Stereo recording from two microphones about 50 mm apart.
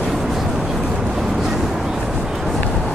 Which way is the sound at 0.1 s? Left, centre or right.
Centre.